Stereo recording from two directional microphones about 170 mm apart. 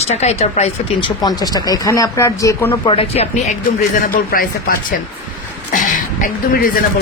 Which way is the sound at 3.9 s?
55° left (ahead or behind).